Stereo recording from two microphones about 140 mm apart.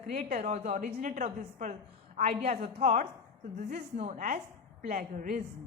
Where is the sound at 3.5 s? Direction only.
55° right (ahead or behind).